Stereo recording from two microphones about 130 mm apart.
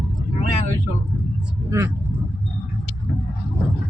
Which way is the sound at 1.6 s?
20° right (ahead or behind).